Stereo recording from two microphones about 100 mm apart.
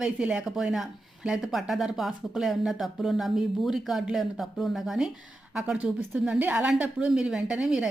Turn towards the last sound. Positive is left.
turn(degrees=-5)  # may be behind; listen again after turning